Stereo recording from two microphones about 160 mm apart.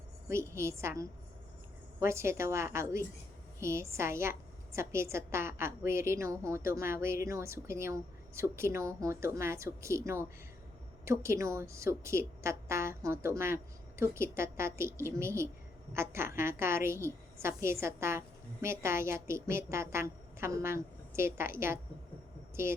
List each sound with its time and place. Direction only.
0.3 s a woman's voice: 15° right (ahead or behind)